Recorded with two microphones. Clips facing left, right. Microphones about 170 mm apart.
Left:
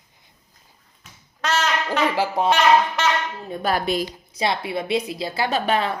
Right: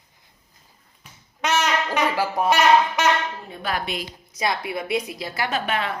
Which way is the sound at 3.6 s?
40° left (ahead or behind).